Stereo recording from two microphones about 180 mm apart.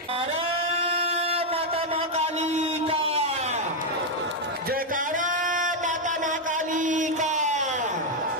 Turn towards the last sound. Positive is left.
turn(degrees=-40)  # may be behind; listen again after turning